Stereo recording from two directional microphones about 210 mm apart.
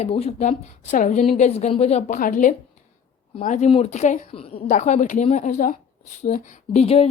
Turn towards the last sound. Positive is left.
turn(degrees=30)  # may be behind; listen again after turning